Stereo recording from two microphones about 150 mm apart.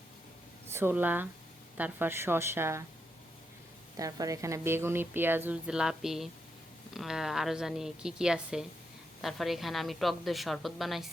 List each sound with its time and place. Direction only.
0.7 s a woman's voice: 15° right (ahead or behind)
3.9 s a woman's voice: 25° right (ahead or behind); by 11.1 s centre (ahead or behind)